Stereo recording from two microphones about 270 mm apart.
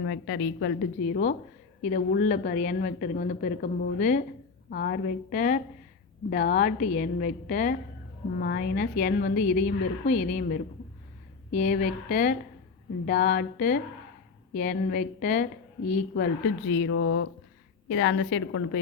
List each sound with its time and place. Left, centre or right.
0.0 s a woman's voice: left
1.0 s a woman's voice: left
16.6 s a woman's voice: left